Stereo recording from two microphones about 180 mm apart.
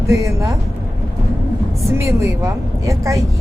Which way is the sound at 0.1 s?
15° right (ahead or behind).